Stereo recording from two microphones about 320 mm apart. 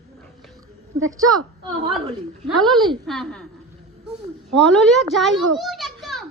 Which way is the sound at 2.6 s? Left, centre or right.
Centre.